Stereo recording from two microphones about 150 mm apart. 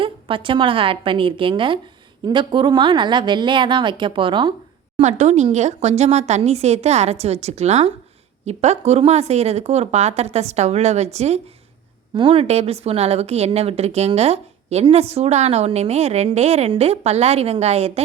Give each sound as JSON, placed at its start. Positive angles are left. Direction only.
{"t": 0.0, "sound": "a woman's voice", "side_deg": -35}
{"t": 4.9, "sound": "a woman's voice", "side_deg": -50}
{"t": 12.1, "sound": "a woman's voice", "side_deg": -35}